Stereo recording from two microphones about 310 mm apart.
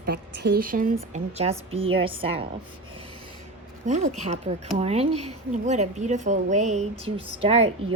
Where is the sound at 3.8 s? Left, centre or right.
Right.